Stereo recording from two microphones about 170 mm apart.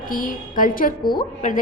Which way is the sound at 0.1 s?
50° left (ahead or behind).